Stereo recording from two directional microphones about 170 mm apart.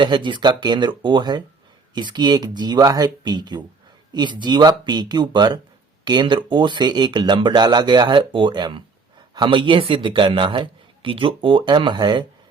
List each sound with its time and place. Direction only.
0.0 s speech: 30° right (ahead or behind)